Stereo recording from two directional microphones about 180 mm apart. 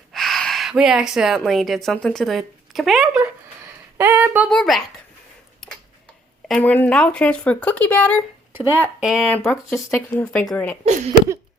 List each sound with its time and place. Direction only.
0.1 s speech: centre (ahead or behind)
5.6 s tick-tock: centre (ahead or behind)
6.5 s speech: 10° left (ahead or behind)
8.5 s speech: 15° right (ahead or behind)
9.0 s speech: centre (ahead or behind)